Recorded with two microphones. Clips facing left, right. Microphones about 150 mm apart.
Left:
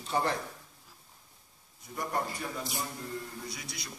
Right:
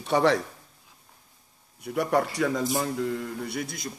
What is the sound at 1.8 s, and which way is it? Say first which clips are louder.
A man's voice: right 10 dB; 75° right (ahead or behind).